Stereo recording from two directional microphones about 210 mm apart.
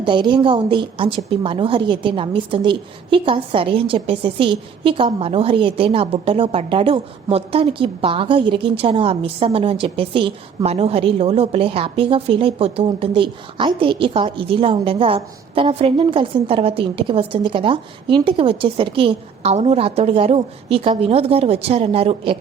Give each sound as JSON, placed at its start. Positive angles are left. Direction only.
{"t": 0.0, "sound": "a woman's voice", "side_deg": -20}